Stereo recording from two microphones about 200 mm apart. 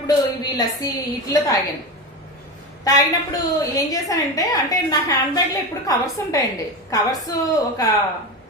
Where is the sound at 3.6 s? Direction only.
20° left (ahead or behind).